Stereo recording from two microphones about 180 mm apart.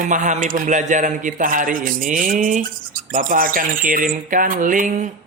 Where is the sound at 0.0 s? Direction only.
45° right (ahead or behind).